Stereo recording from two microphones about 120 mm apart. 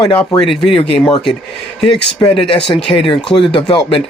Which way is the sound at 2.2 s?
50° left (ahead or behind).